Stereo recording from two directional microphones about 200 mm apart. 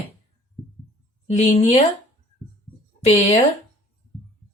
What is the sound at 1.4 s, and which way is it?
Speech, 35° left (ahead or behind).